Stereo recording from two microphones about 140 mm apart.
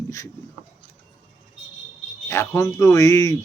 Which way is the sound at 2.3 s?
20° left (ahead or behind).